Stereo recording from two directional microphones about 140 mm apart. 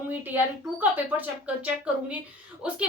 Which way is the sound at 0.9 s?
10° right (ahead or behind).